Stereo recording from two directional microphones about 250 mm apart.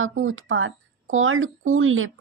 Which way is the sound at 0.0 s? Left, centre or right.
Right.